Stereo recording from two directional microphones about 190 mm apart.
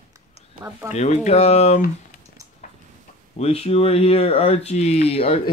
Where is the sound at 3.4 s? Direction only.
30° left (ahead or behind).